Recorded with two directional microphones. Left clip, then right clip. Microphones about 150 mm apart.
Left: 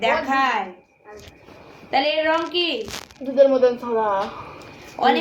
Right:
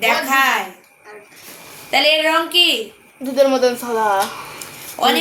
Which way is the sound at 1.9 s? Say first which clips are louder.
Right 5 dB; 25° right (ahead or behind).